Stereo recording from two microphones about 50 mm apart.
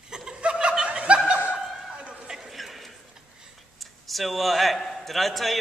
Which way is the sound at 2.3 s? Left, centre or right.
Centre.